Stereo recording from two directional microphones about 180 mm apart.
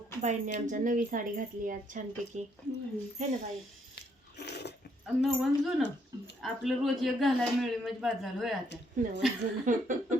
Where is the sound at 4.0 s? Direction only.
65° left (ahead or behind).